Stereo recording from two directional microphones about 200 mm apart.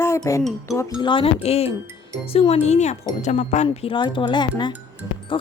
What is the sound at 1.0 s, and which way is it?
Speech, 25° left (ahead or behind).